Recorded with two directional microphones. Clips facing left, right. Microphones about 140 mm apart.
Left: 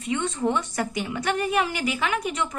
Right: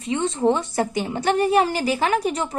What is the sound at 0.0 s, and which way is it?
A woman's voice, 30° right (ahead or behind).